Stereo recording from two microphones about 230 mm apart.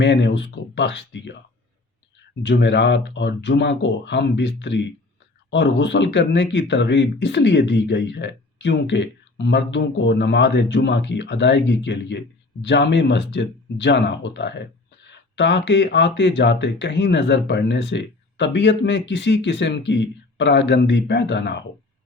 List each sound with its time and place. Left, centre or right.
0.0 s speech: left
2.4 s speech: left